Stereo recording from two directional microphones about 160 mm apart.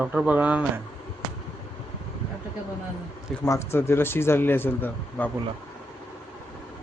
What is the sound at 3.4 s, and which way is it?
Speech, 15° left (ahead or behind).